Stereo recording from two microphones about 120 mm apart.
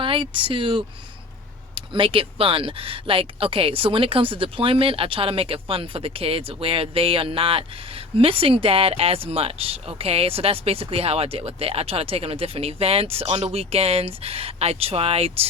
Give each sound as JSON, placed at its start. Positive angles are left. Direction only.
{"t": 0.0, "sound": "speech", "side_deg": -45}